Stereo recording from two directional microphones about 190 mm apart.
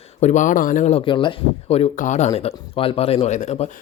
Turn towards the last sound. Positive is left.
turn(degrees=35)  # may be behind; listen again after turning